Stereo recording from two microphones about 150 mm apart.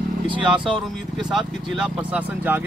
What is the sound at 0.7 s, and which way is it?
Speech, centre (ahead or behind).